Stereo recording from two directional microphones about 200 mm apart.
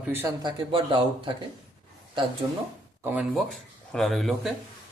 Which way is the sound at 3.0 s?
5° right (ahead or behind).